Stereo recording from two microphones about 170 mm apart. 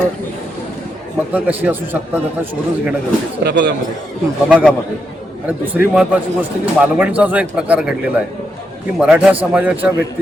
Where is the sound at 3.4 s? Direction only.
90° right.